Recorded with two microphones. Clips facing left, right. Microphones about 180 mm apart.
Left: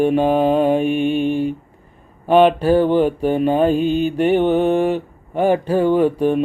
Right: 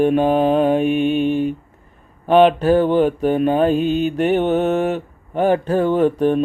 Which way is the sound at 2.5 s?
10° left (ahead or behind).